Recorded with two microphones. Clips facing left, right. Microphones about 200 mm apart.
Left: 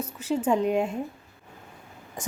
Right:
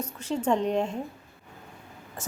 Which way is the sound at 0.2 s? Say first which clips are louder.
Left 2 dB; 10° left (ahead or behind).